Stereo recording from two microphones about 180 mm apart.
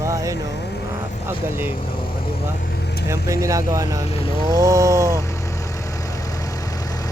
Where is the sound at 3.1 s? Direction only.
15° right (ahead or behind).